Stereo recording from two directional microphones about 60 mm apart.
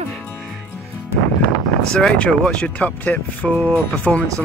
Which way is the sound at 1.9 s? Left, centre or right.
Centre.